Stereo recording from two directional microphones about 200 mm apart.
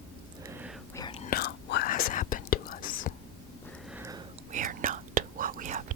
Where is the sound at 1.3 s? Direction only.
55° left (ahead or behind).